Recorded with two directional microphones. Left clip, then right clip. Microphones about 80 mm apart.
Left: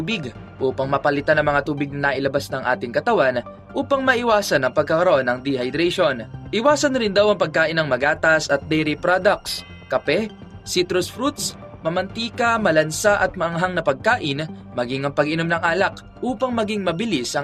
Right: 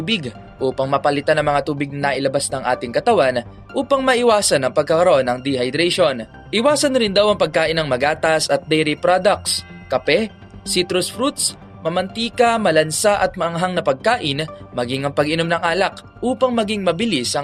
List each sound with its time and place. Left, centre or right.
0.0 s speech: right